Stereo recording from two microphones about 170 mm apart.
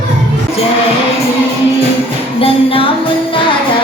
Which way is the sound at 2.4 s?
35° left (ahead or behind).